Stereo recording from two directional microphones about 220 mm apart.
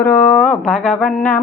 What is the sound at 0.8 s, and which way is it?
Music, 5° left (ahead or behind).